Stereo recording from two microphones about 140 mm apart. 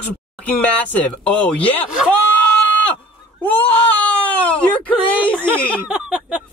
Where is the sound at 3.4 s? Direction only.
10° left (ahead or behind).